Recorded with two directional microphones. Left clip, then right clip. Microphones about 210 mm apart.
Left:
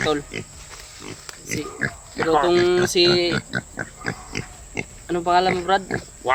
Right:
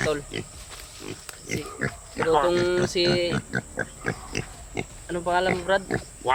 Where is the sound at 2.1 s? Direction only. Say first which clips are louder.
Left 2 dB; 15° left (ahead or behind).